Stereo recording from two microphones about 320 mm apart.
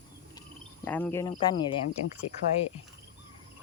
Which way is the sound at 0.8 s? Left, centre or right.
Centre.